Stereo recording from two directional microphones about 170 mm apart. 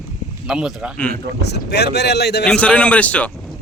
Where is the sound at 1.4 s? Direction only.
75° left (ahead or behind).